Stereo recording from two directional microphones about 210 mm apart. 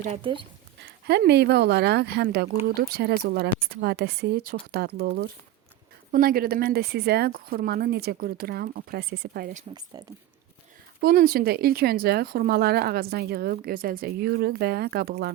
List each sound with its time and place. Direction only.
0.0 s speech: 30° right (ahead or behind)
1.0 s speech: 50° right (ahead or behind)
9.9 s speech: 20° right (ahead or behind)
11.0 s speech: 45° right (ahead or behind)